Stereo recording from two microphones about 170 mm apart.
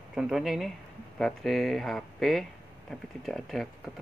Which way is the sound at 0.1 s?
5° right (ahead or behind).